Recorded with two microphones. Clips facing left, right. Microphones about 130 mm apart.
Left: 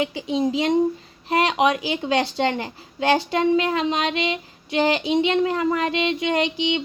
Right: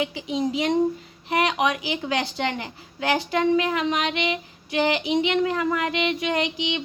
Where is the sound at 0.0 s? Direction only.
30° left (ahead or behind).